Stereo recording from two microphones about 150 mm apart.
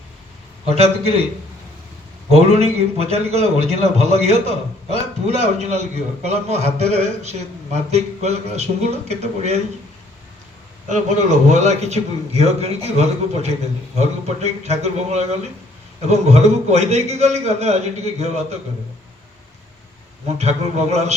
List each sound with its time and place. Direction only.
0.6 s a man's voice: 45° right (ahead or behind)
2.3 s a man's voice: 45° right (ahead or behind)
10.8 s a man's voice: 55° right (ahead or behind)
20.2 s a man's voice: 45° right (ahead or behind)